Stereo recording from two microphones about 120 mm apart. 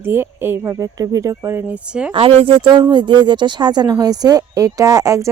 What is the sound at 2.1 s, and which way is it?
Speech, 50° right (ahead or behind).